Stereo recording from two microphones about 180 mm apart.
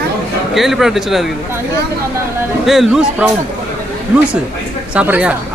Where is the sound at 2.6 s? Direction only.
Centre (ahead or behind).